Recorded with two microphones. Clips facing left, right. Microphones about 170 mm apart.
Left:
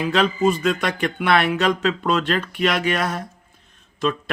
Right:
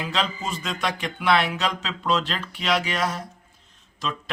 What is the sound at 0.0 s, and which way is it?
Speech, 60° left (ahead or behind).